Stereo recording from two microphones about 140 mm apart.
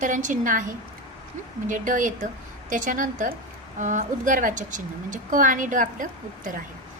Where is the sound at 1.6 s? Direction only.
70° right (ahead or behind).